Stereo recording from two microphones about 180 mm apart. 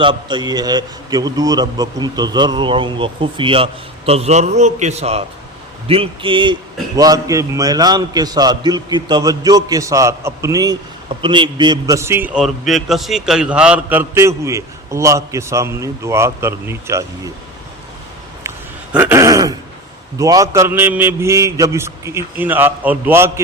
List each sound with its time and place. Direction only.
0.0 s a man's voice: 25° right (ahead or behind)
18.4 s a sound: 10° right (ahead or behind)
20.1 s a man's voice: 20° right (ahead or behind)